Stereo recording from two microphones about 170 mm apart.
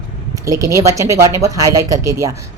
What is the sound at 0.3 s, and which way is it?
A woman's voice, 20° right (ahead or behind).